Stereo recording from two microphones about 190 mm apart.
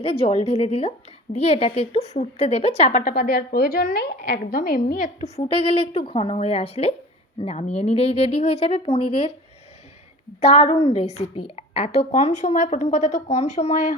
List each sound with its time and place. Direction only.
0.0 s a woman's voice: 30° left (ahead or behind)
3.0 s a woman's voice: 50° left (ahead or behind)
5.2 s a woman's voice: 30° left (ahead or behind)
10.4 s a woman's voice: 30° left (ahead or behind)